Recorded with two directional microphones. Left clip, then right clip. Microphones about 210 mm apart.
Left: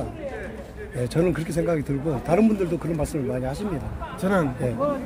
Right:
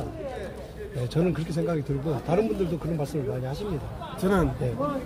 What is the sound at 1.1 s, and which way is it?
Speech, 60° left (ahead or behind).